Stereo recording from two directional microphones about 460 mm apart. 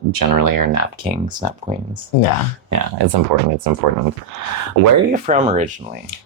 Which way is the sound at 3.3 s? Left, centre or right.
Right.